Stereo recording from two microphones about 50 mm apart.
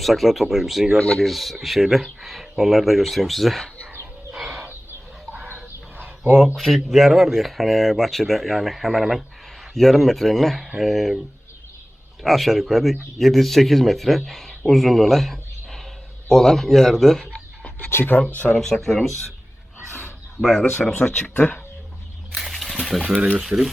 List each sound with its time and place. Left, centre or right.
0.0 s speech: centre
6.6 s speech: centre
12.2 s a man's voice: centre
17.8 s speech: left
18.5 s speech: centre
20.4 s speech: centre
20.9 s speech: left
22.5 s a sound: centre
23.4 s speech: centre